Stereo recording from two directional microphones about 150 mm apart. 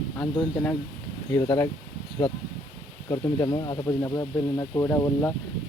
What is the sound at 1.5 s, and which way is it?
Speech, 20° left (ahead or behind).